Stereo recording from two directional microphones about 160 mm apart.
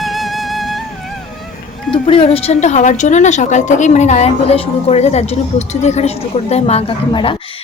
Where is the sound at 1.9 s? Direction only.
35° left (ahead or behind).